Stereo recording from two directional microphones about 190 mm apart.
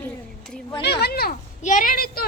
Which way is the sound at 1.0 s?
55° left (ahead or behind).